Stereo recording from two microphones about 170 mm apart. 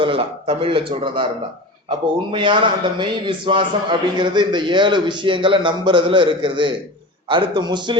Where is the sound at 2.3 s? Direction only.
30° right (ahead or behind).